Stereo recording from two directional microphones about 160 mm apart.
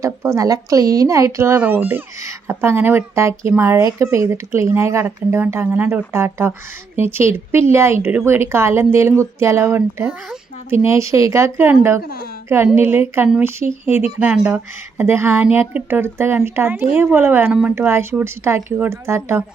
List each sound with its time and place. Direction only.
0.0 s speech: 20° right (ahead or behind)